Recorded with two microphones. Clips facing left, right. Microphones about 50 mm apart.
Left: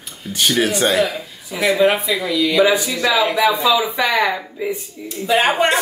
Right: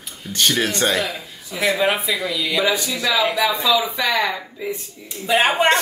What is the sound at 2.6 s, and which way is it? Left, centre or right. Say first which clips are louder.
Speech: left 5 dB; centre.